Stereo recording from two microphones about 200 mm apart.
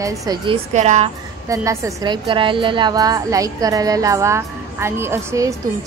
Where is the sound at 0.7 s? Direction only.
35° right (ahead or behind).